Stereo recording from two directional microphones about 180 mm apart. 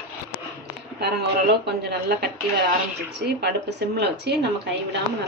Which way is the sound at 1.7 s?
65° right (ahead or behind).